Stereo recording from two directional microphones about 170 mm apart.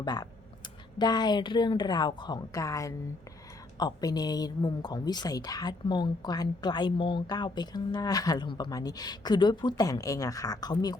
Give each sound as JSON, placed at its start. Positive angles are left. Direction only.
{"t": 0.0, "sound": "a woman's voice", "side_deg": 25}